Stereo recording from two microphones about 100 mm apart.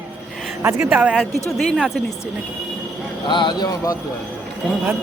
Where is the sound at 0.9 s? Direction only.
15° right (ahead or behind).